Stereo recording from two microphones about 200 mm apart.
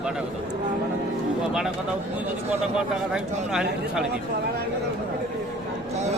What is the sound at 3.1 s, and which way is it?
Speech, 5° right (ahead or behind).